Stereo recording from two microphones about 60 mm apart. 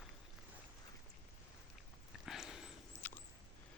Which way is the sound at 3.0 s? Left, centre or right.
Left.